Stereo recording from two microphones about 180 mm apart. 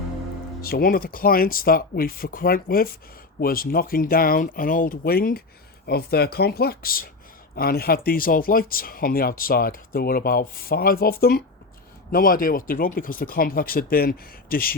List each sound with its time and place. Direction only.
0.6 s speech: 55° left (ahead or behind)